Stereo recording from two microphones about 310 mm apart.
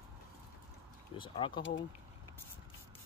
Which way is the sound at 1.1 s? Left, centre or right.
Centre.